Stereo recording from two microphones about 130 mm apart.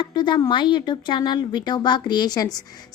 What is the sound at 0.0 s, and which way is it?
A woman's voice, 35° left (ahead or behind).